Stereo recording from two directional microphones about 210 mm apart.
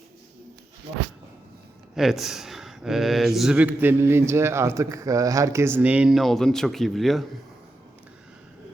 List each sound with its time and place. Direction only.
2.0 s speech: centre (ahead or behind)